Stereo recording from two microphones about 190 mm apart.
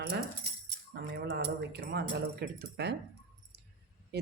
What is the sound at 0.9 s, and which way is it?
Speech, 55° right (ahead or behind).